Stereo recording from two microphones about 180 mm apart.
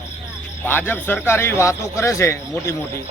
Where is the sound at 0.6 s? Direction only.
10° left (ahead or behind).